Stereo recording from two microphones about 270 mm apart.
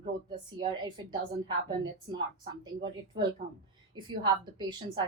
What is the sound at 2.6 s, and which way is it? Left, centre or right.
A woman's voice, centre.